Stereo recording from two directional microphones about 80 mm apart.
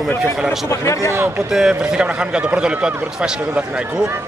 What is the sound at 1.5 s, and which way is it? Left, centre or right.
A man's voice, centre.